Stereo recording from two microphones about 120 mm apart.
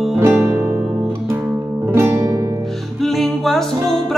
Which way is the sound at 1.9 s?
25° right (ahead or behind).